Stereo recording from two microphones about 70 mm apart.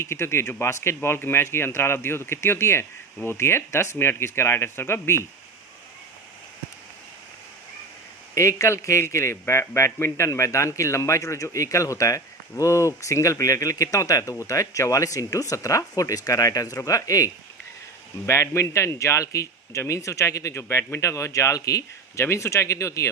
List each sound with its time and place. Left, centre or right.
0.0 s speech: left
8.4 s a man's voice: left
18.3 s a man's voice: left
22.2 s a man's voice: left